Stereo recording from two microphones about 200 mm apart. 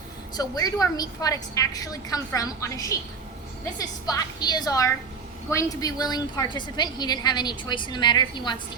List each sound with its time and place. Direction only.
0.3 s a woman's voice: 20° left (ahead or behind)